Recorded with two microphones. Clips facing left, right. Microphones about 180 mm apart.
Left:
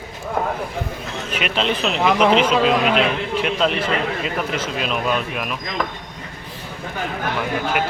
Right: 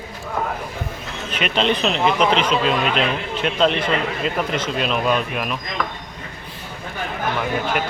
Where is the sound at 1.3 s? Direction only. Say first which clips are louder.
Right 2 dB; 5° left (ahead or behind).